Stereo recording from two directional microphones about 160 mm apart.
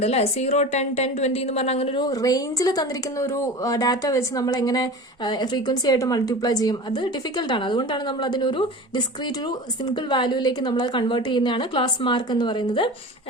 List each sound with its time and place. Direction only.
0.0 s a woman's voice: 40° left (ahead or behind)